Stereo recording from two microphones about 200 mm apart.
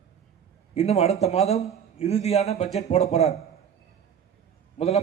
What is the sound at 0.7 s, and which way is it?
A man's voice, 30° left (ahead or behind).